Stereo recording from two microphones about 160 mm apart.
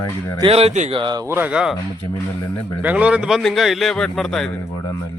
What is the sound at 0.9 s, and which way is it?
Speech, 30° right (ahead or behind).